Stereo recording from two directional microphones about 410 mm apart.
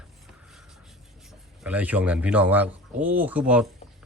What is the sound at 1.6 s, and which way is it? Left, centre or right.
Speech, centre.